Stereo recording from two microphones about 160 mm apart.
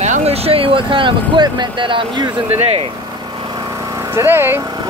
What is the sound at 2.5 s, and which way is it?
Vehicle, 35° right (ahead or behind).